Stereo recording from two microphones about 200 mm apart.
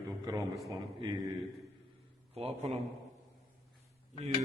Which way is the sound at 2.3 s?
30° right (ahead or behind).